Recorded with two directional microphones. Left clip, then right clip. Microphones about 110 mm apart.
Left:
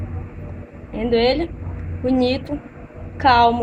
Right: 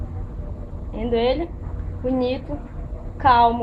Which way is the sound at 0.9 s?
50° left (ahead or behind).